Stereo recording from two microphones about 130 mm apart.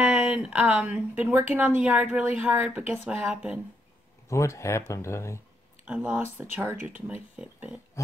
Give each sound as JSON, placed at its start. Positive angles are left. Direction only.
{"t": 0.0, "sound": "speech", "side_deg": -5}
{"t": 4.3, "sound": "speech", "side_deg": 20}
{"t": 5.9, "sound": "speech", "side_deg": -10}